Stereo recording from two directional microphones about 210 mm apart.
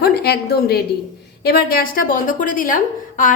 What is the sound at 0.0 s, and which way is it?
A woman's voice, 50° left (ahead or behind).